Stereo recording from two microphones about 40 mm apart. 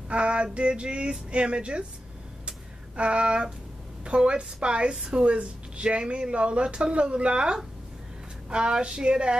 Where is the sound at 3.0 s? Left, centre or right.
Right.